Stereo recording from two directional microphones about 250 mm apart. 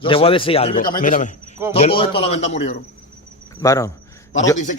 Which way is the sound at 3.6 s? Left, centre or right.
Centre.